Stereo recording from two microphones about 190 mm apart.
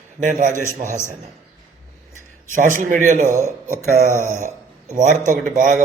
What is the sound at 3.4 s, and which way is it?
Speech, 15° left (ahead or behind).